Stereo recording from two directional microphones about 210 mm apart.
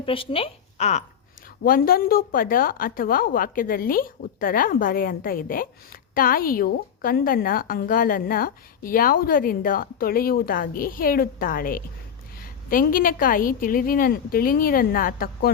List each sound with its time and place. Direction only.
0.0 s speech: 25° left (ahead or behind)
1.6 s a woman's voice: 45° left (ahead or behind)